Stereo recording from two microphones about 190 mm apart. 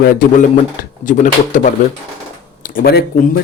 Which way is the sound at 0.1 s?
45° left (ahead or behind).